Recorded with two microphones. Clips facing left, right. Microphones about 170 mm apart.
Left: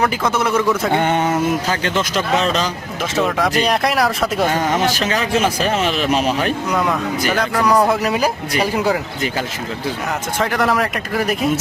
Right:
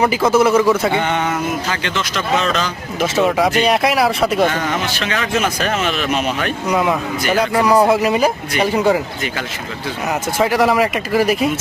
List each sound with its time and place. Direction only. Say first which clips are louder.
0.0 s speech: right 5 dB; 5° right (ahead or behind)
0.9 s speech: left 2 dB; 45° left (ahead or behind)
3.0 s speech: right 3 dB; 5° right (ahead or behind)
4.9 s speech: left 2 dB; 40° left (ahead or behind)
6.7 s speech: right 1 dB; 5° right (ahead or behind)
10.3 s speech: right 4 dB; 5° right (ahead or behind)